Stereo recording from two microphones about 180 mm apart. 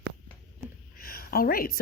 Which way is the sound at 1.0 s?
55° left (ahead or behind).